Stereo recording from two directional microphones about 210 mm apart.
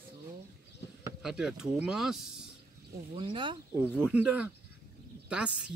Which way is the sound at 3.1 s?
25° right (ahead or behind).